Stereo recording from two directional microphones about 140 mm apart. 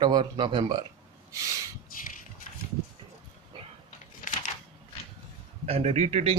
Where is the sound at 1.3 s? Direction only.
25° right (ahead or behind).